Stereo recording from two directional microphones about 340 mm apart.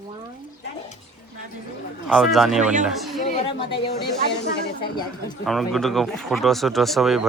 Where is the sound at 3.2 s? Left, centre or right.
Centre.